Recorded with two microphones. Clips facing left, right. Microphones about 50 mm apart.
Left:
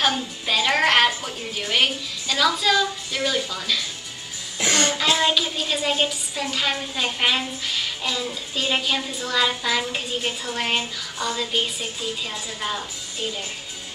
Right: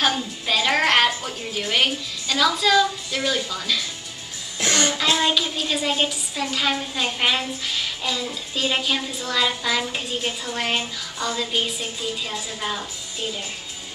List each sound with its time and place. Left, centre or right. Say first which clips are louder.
0.0 s a woman's voice: even; centre
4.6 s throat clearing: even; centre
4.8 s a woman's voice: even; centre